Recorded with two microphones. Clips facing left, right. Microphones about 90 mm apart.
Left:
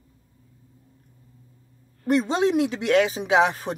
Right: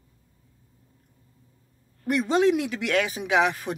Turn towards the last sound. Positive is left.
turn(degrees=30)  # may be behind; listen again after turning